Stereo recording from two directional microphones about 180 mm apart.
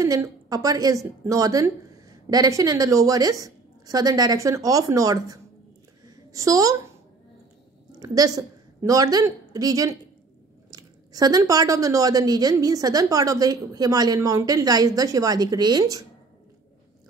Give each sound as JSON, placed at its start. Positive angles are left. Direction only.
{"t": 0.0, "sound": "a woman's voice", "side_deg": -20}
{"t": 6.0, "sound": "a sound", "side_deg": -20}
{"t": 8.0, "sound": "a woman's voice", "side_deg": -20}